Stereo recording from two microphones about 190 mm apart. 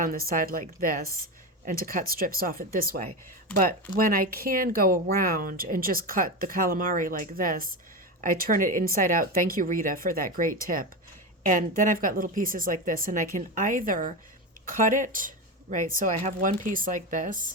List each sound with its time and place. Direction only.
0.0 s speech: 50° right (ahead or behind)